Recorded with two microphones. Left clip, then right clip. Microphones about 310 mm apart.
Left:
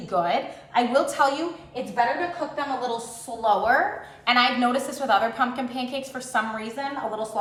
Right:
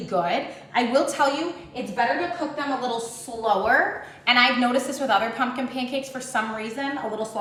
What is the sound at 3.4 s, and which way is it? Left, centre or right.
A woman's voice, centre.